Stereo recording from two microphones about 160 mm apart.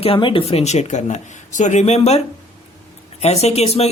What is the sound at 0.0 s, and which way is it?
Speech, 35° left (ahead or behind).